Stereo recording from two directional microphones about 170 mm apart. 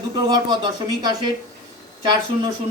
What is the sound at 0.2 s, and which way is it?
Speech, 25° right (ahead or behind).